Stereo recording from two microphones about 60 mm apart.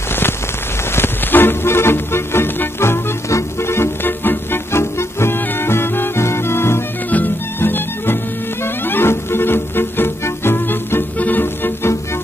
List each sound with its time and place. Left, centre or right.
0.1 s rain on surface: left
0.9 s music: left
3.3 s music: left
7.1 s music: left